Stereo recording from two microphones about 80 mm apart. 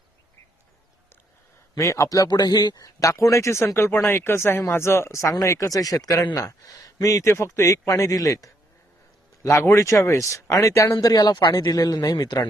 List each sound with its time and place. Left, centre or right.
1.7 s speech: left
5.3 s speech: left
9.4 s speech: left